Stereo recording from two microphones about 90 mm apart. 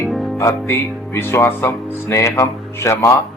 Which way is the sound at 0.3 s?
30° left (ahead or behind).